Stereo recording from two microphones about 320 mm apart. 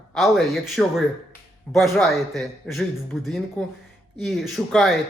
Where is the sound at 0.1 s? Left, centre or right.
Centre.